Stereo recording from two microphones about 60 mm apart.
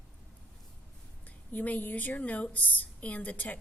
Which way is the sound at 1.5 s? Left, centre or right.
Left.